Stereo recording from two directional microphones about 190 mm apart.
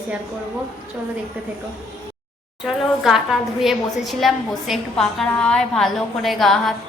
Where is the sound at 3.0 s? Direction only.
Centre (ahead or behind).